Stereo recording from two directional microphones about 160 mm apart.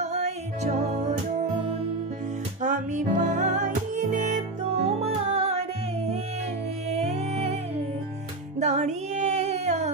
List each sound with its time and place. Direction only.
0.0 s music: 45° right (ahead or behind)
2.6 s music: 50° right (ahead or behind)